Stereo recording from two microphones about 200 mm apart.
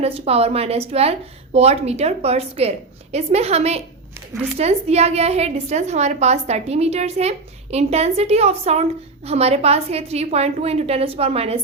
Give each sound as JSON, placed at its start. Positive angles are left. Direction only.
{"t": 0.0, "sound": "a woman's voice", "side_deg": -30}